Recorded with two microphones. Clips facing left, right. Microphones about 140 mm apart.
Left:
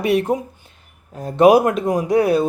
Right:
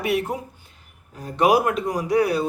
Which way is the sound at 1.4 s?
25° left (ahead or behind).